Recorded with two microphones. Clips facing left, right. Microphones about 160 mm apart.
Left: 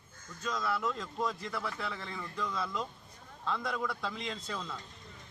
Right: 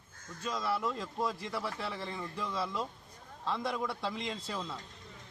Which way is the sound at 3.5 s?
30° right (ahead or behind).